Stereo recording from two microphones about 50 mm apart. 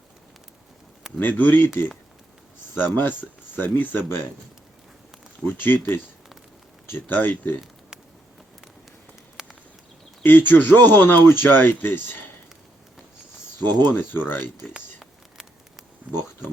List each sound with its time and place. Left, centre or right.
1.2 s speech: left
1.6 s speech: left
2.7 s speech: left
5.5 s speech: left
7.1 s speech: left
9.4 s a sound: centre
10.2 s speech: left
13.7 s speech: left
14.3 s speech: centre